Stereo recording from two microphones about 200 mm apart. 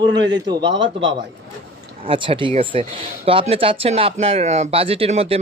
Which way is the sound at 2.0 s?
25° right (ahead or behind).